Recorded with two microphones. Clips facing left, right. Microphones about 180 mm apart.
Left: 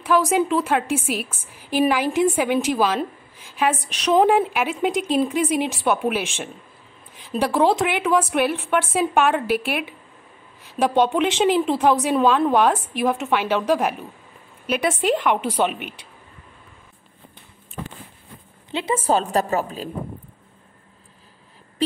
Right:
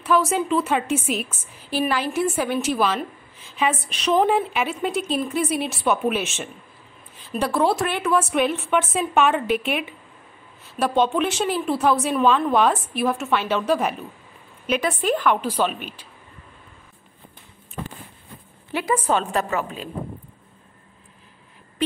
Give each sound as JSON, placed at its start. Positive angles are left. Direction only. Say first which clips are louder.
{"t": 0.0, "sound": "a woman's voice", "louder": "left 2 dB", "side_deg": 15}
{"t": 15.0, "sound": "speech", "louder": "left 1 dB", "side_deg": 20}
{"t": 18.7, "sound": "a woman's voice", "louder": "right 1 dB", "side_deg": 20}
{"t": 19.0, "sound": "a woman's voice", "louder": "left 2 dB", "side_deg": 35}